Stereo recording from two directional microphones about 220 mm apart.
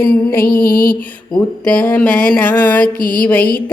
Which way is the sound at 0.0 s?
10° left (ahead or behind).